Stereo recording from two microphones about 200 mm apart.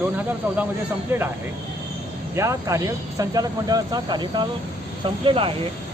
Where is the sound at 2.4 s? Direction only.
15° right (ahead or behind).